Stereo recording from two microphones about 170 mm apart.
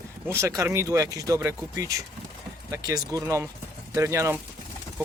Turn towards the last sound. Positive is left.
turn(degrees=-15)  # may be behind; listen again after turning